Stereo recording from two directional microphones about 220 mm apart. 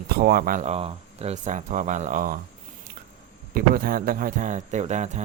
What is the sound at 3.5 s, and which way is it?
Speech, 40° right (ahead or behind).